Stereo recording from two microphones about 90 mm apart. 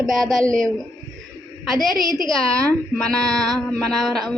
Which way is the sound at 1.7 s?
Centre (ahead or behind).